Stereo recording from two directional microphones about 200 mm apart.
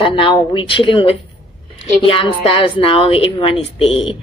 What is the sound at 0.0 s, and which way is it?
A woman's voice, 25° left (ahead or behind).